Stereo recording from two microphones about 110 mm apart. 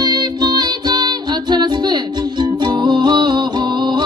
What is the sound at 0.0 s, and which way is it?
Music, 40° right (ahead or behind).